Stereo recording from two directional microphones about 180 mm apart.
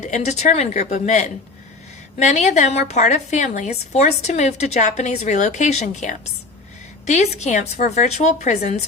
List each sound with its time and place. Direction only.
0.1 s a woman's voice: 40° left (ahead or behind)